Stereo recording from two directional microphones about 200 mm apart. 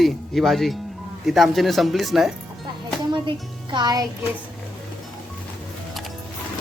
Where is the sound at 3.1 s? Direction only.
25° right (ahead or behind).